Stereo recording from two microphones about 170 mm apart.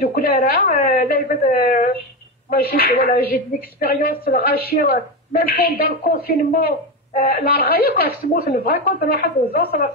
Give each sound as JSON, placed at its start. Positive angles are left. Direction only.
{"t": 0.0, "sound": "a woman's voice", "side_deg": 60}